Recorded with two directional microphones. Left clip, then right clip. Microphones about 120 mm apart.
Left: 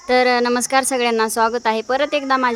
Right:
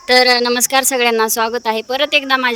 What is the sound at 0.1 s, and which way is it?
Speech, 90° right.